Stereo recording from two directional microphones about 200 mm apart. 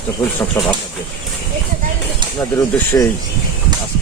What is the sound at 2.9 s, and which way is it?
Speech, 20° left (ahead or behind).